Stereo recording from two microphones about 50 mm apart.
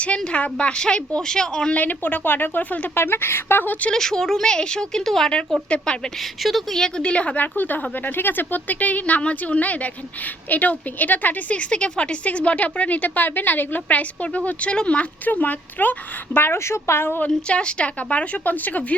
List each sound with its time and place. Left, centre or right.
0.0 s a woman's voice: left
1.7 s speech: left
3.9 s a woman's voice: centre; by 16.4 s left
16.4 s speech: left
17.2 s a woman's voice: left